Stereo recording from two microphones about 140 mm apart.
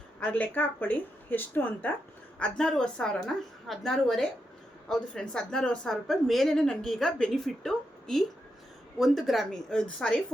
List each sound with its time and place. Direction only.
0.2 s a woman's voice: 10° left (ahead or behind)